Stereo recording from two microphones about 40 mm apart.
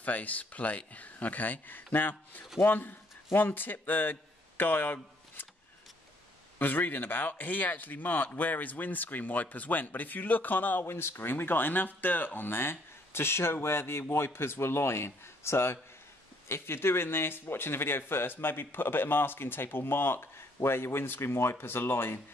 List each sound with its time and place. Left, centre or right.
0.0 s a man's voice: left
6.6 s speech: left
10.9 s speech: left
12.4 s speech: left